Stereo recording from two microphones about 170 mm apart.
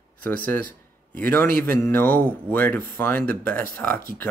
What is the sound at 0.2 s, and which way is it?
A man's voice, 10° left (ahead or behind).